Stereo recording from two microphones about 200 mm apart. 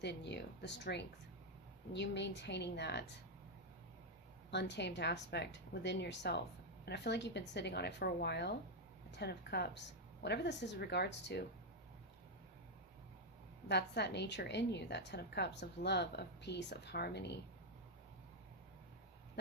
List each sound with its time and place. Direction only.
0.0 s a woman's voice: 60° left (ahead or behind)
4.5 s a woman's voice: 60° left (ahead or behind)
13.7 s a woman's voice: 55° left (ahead or behind)